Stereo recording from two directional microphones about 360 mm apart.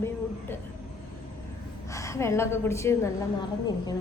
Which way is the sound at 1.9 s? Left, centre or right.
Centre.